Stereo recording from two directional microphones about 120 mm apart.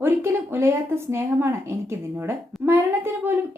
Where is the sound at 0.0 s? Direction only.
20° right (ahead or behind).